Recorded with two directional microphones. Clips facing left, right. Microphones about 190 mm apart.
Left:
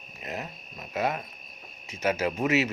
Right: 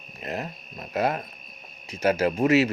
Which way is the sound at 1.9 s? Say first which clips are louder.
Right 4 dB; 30° right (ahead or behind).